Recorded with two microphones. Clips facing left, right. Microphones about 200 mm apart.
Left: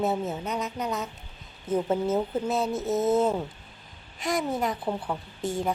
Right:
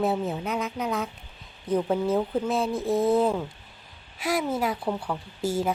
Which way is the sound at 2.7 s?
20° left (ahead or behind).